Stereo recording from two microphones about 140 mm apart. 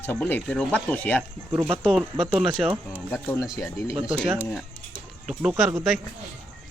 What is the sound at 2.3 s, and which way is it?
Speech, 5° right (ahead or behind).